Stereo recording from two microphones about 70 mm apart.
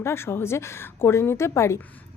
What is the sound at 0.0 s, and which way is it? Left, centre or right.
A woman's voice, left.